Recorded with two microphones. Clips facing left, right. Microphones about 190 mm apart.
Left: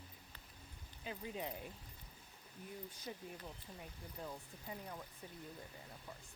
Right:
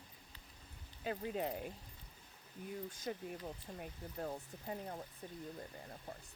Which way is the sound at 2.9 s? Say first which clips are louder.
Right 6 dB; 45° right (ahead or behind).